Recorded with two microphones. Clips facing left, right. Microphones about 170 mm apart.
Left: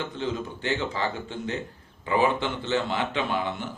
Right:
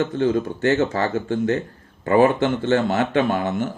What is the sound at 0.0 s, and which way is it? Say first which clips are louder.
A man's voice: right 10 dB; 50° right (ahead or behind).